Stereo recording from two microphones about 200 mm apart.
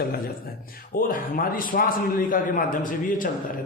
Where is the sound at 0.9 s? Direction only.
45° left (ahead or behind).